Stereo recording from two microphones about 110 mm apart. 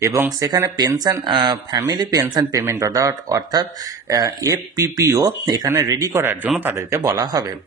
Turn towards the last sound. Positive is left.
turn(degrees=-35)  # may be behind; listen again after turning